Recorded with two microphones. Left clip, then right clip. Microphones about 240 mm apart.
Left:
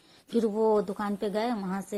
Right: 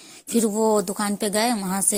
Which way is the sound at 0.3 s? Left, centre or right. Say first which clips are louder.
Right 4 dB; right.